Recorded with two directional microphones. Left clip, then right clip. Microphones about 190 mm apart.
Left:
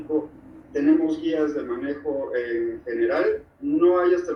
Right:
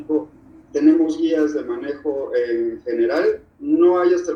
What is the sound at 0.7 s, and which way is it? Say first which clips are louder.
A man's voice: right 5 dB; 50° right (ahead or behind).